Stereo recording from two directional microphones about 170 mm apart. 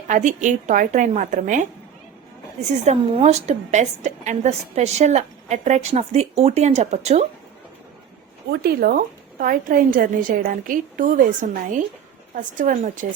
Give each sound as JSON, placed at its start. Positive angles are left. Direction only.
{"t": 0.1, "sound": "a woman's voice", "side_deg": -45}
{"t": 2.8, "sound": "a woman's voice", "side_deg": -40}
{"t": 8.4, "sound": "a woman's voice", "side_deg": -65}